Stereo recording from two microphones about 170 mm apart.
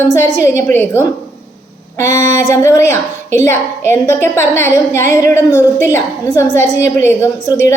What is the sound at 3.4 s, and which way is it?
A woman's voice, 15° left (ahead or behind).